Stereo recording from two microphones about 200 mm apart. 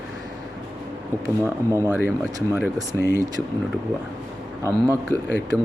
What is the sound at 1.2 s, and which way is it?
Speech, 15° right (ahead or behind).